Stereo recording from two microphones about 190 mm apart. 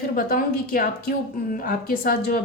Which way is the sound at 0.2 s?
45° left (ahead or behind).